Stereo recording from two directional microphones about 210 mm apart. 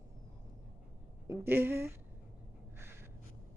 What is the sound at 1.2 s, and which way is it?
Speech, 10° right (ahead or behind).